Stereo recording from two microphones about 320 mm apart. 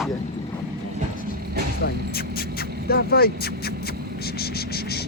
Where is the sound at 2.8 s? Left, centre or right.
Left.